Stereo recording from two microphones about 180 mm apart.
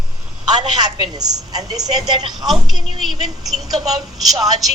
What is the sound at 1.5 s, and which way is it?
Speech, 20° right (ahead or behind).